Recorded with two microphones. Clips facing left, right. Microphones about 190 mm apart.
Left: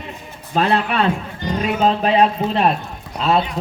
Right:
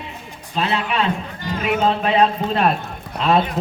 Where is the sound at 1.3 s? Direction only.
20° left (ahead or behind).